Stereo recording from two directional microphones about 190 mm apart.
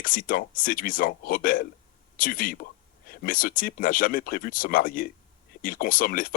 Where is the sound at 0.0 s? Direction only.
45° left (ahead or behind).